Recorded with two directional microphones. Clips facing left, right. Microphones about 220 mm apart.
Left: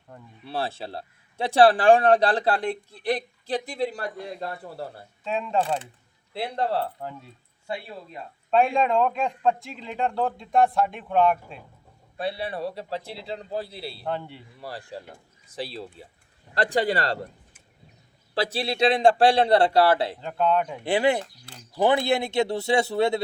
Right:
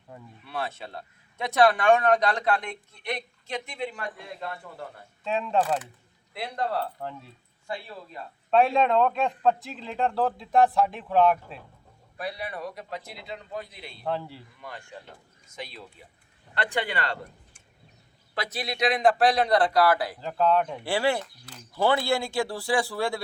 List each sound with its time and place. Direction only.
0.1 s a man's voice: 5° right (ahead or behind)
0.4 s a man's voice: 30° left (ahead or behind)
5.2 s a man's voice: centre (ahead or behind)
6.3 s speech: 30° left (ahead or behind)
7.0 s a man's voice: centre (ahead or behind)
7.7 s speech: 20° left (ahead or behind)
8.4 s a man's voice: centre (ahead or behind)
12.1 s a man's voice: 30° left (ahead or behind)
14.0 s a man's voice: centre (ahead or behind)
14.6 s a man's voice: 35° left (ahead or behind)
18.3 s speech: 30° left (ahead or behind)
20.1 s a man's voice: centre (ahead or behind)
20.8 s speech: 20° left (ahead or behind)